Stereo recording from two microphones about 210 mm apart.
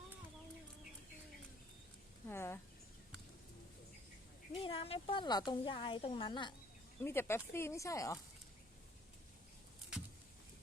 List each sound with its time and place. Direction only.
2.2 s a sound: 10° left (ahead or behind)
4.5 s a woman's voice: 25° left (ahead or behind)
7.0 s speech: 10° left (ahead or behind)